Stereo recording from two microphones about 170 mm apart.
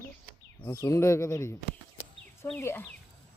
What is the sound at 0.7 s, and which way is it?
Speech, 15° left (ahead or behind).